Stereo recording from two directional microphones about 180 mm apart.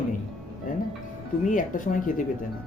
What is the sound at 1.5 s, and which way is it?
Speech, 45° left (ahead or behind).